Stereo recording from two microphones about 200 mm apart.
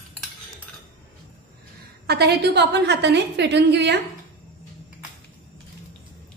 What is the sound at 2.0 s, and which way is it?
A woman's voice, 55° right (ahead or behind).